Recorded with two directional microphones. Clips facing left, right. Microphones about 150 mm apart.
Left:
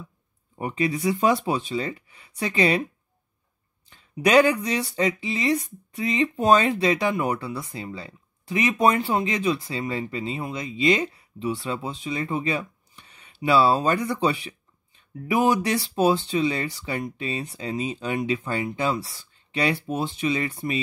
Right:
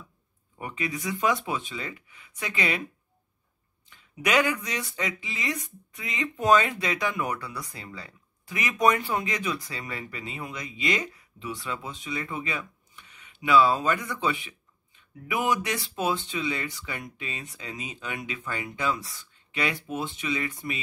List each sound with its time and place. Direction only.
0.6 s speech: 35° left (ahead or behind)
3.9 s speech: 35° left (ahead or behind)